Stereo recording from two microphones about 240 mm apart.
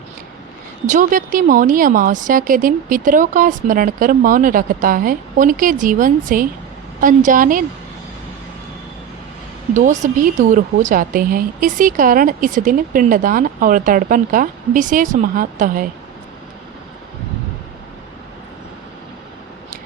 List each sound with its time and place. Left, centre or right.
0.9 s a woman's voice: right
9.7 s a woman's voice: right